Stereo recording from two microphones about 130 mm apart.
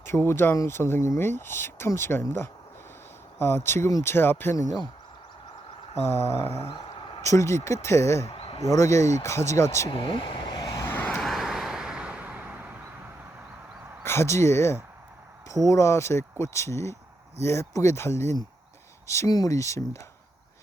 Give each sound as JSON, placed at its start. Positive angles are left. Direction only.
{"t": 0.0, "sound": "speech", "side_deg": 20}
{"t": 6.0, "sound": "speech", "side_deg": 20}
{"t": 6.7, "sound": "a sound", "side_deg": 40}
{"t": 7.2, "sound": "speech", "side_deg": 25}
{"t": 8.3, "sound": "a sound", "side_deg": 50}
{"t": 8.6, "sound": "speech", "side_deg": 25}
{"t": 9.9, "sound": "vehicle", "side_deg": 40}
{"t": 11.2, "sound": "vehicle", "side_deg": 0}
{"t": 14.0, "sound": "speech", "side_deg": 20}